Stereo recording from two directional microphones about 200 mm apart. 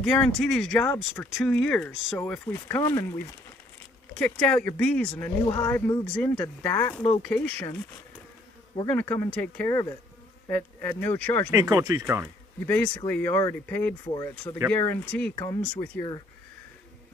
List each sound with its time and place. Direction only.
0.0 s speech: centre (ahead or behind)
4.1 s speech: 5° left (ahead or behind)
5.4 s speech: 20° left (ahead or behind)
5.7 s speech: 10° left (ahead or behind)
8.8 s speech: 10° left (ahead or behind)
11.5 s speech: 15° right (ahead or behind)
12.6 s speech: 10° left (ahead or behind)